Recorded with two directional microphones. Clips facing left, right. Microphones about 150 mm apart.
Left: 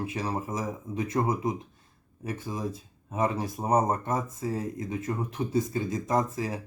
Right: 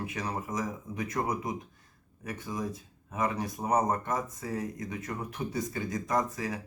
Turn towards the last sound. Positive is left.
turn(degrees=25)  # may be behind; listen again after turning